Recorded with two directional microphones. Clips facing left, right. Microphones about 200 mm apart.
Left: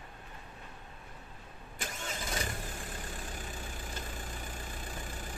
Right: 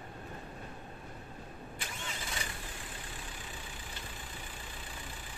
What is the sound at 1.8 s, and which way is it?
Vehicle, 45° left (ahead or behind).